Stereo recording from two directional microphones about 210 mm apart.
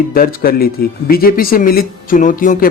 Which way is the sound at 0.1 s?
45° left (ahead or behind).